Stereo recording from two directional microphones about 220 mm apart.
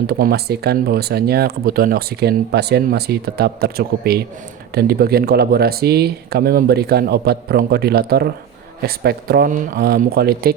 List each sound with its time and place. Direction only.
0.1 s speech: 45° right (ahead or behind)